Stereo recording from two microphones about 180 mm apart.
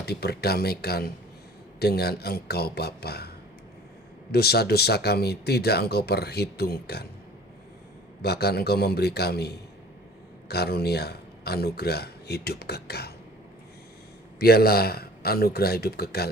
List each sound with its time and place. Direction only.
0.0 s speech: 60° left (ahead or behind)
8.2 s speech: 65° left (ahead or behind)
10.5 s speech: 65° left (ahead or behind)
14.3 s speech: 60° left (ahead or behind)